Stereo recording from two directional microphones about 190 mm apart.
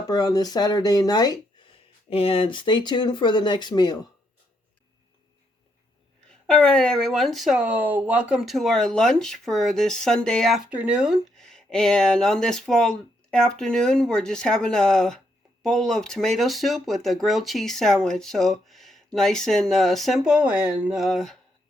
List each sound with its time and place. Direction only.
0.1 s speech: 20° left (ahead or behind)
6.5 s speech: 5° left (ahead or behind)